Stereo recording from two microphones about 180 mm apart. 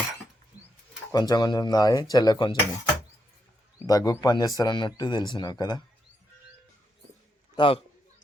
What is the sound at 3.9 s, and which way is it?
Speech, 20° left (ahead or behind).